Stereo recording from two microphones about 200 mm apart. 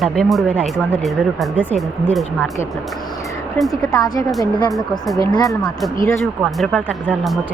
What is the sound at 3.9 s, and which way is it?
Speech, 20° left (ahead or behind).